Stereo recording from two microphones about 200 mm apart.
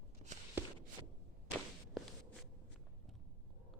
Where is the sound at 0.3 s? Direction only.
35° right (ahead or behind).